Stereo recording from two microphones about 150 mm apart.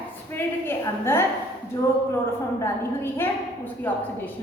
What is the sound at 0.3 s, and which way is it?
Speech, 15° left (ahead or behind).